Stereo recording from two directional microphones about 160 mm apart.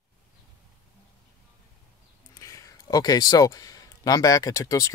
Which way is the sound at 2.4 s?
20° left (ahead or behind).